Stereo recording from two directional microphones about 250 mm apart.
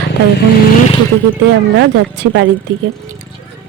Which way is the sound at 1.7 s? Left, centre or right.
Right.